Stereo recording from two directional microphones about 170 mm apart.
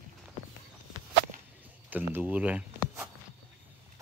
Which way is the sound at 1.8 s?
10° right (ahead or behind).